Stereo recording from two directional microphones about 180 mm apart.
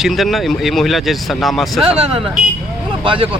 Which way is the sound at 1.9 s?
35° right (ahead or behind).